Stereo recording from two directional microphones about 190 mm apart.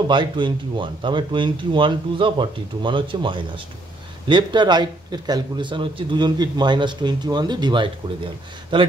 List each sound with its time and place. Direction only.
0.1 s speech: 25° right (ahead or behind)